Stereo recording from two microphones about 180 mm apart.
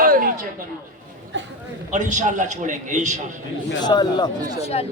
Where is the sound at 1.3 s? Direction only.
90° right.